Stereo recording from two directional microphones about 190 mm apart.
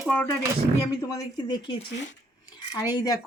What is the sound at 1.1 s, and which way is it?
Speech, 25° left (ahead or behind).